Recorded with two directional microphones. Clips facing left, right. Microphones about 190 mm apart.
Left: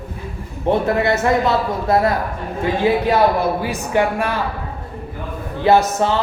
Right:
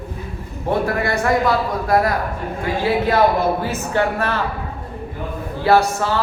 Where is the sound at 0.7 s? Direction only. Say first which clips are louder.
Left 3 dB; 20° left (ahead or behind).